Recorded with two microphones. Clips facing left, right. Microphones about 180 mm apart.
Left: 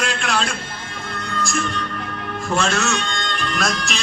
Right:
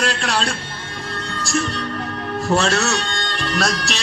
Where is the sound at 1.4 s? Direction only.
35° right (ahead or behind).